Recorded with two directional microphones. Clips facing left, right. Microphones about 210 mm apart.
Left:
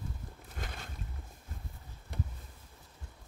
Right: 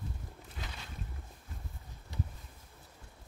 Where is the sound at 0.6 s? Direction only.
50° left (ahead or behind).